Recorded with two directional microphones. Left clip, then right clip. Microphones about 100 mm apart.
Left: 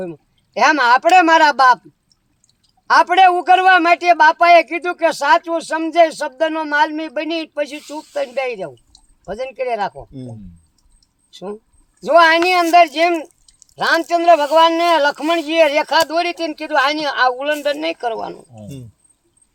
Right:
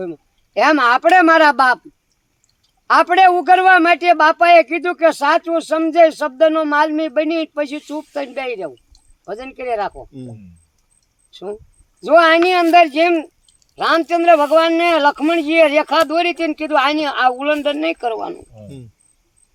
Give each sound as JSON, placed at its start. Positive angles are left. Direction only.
{"t": 0.0, "sound": "a man's voice", "side_deg": -25}
{"t": 2.8, "sound": "a man's voice", "side_deg": -20}
{"t": 11.3, "sound": "a man's voice", "side_deg": -20}
{"t": 18.6, "sound": "speech", "side_deg": 10}